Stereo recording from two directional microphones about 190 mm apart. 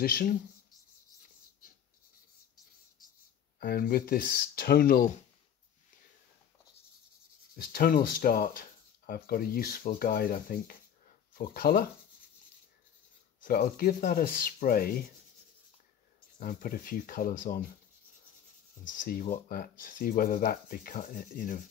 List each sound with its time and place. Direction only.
0.0 s speech: 50° left (ahead or behind)
3.5 s speech: 50° left (ahead or behind)
7.5 s speech: 55° left (ahead or behind)
13.4 s speech: 45° left (ahead or behind)
16.3 s speech: 45° left (ahead or behind)
18.9 s speech: 45° left (ahead or behind)